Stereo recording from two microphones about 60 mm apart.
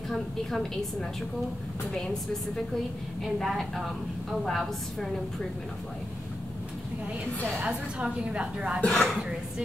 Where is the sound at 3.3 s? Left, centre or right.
Centre.